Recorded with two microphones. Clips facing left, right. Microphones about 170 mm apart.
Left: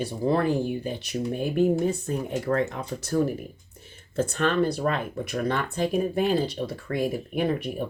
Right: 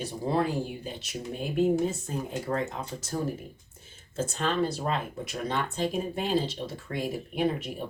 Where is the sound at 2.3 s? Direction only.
65° left (ahead or behind).